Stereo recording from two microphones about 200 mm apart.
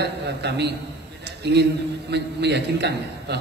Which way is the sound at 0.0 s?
55° right (ahead or behind).